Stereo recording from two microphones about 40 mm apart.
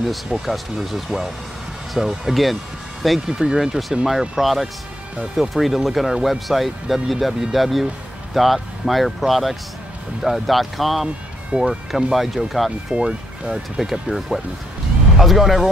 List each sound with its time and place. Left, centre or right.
0.0 s speech: centre
11.5 s speech: right
11.9 s speech: centre